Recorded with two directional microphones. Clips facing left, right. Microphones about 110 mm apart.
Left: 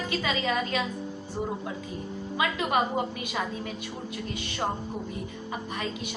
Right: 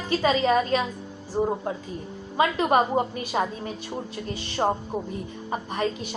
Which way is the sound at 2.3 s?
35° right (ahead or behind).